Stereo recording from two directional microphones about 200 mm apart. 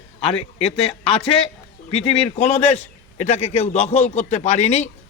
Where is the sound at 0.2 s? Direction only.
30° left (ahead or behind).